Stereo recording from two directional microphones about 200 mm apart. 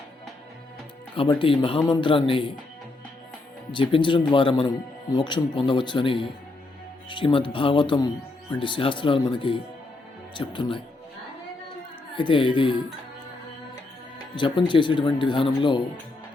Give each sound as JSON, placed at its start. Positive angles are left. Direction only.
{"t": 1.1, "sound": "speech", "side_deg": 25}
{"t": 3.7, "sound": "speech", "side_deg": 25}
{"t": 12.1, "sound": "speech", "side_deg": 25}
{"t": 14.3, "sound": "speech", "side_deg": 25}